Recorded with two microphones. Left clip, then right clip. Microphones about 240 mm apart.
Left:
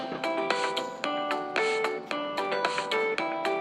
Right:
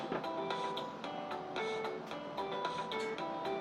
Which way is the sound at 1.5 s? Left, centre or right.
Left.